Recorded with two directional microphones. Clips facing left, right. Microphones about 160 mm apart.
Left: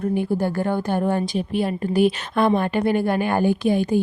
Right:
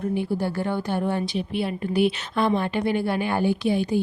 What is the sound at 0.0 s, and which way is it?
A woman's voice, 50° left (ahead or behind).